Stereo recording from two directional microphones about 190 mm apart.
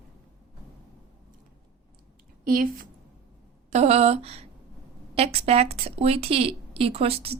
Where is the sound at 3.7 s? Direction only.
35° right (ahead or behind).